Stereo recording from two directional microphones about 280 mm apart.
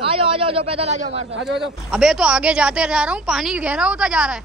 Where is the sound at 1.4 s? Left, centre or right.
Centre.